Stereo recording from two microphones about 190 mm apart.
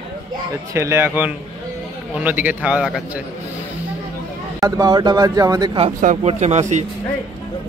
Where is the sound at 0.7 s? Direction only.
15° right (ahead or behind).